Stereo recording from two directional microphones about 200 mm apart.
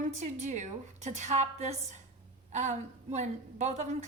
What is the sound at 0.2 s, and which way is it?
A woman's voice, 35° right (ahead or behind).